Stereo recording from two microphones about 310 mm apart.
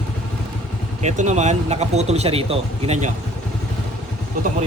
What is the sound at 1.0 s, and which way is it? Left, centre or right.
Speech, right.